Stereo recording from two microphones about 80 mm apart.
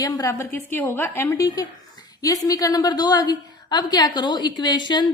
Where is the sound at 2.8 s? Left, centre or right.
Left.